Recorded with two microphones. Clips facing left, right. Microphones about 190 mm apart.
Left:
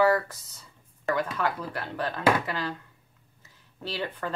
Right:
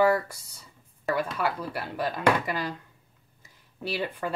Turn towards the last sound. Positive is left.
turn(degrees=-10)  # may be behind; listen again after turning